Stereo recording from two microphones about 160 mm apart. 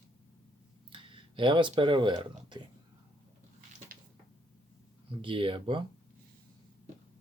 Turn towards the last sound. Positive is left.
turn(degrees=-30)  # may be behind; listen again after turning